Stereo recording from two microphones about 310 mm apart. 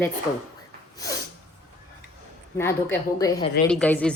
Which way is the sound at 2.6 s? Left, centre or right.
Centre.